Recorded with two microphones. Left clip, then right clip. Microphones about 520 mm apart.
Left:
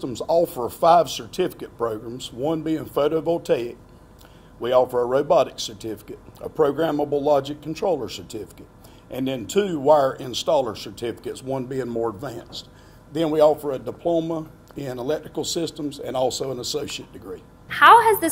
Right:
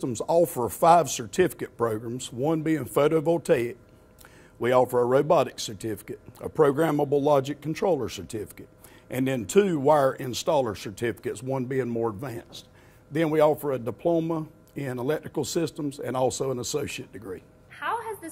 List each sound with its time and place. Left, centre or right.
0.0 s speech: right
17.6 s a woman's voice: left